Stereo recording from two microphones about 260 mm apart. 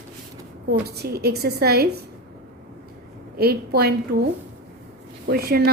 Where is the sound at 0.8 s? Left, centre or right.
Right.